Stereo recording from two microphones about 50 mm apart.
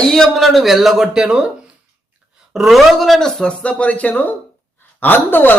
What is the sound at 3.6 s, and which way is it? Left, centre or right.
A woman's voice, left.